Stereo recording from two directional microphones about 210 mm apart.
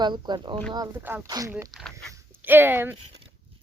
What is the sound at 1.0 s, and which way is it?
Speech, 10° right (ahead or behind).